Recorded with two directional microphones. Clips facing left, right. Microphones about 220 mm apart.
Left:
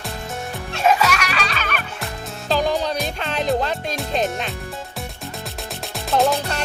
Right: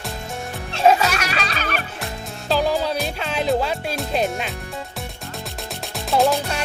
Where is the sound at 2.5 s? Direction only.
5° right (ahead or behind).